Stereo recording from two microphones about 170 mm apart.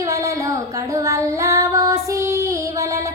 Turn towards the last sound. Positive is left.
turn(degrees=-20)  # may be behind; listen again after turning